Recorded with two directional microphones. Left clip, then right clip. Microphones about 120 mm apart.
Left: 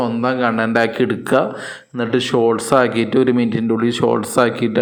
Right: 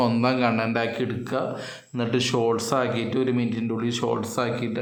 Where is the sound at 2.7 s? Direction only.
45° left (ahead or behind).